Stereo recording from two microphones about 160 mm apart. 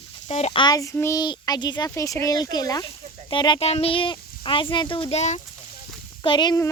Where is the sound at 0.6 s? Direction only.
20° left (ahead or behind); by 5.4 s 45° left (ahead or behind).